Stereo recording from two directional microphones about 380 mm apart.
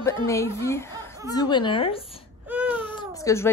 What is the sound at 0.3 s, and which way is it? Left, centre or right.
Speech, centre.